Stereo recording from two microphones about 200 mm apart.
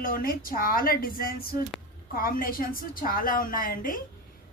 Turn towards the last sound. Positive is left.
turn(degrees=45)  # may be behind; listen again after turning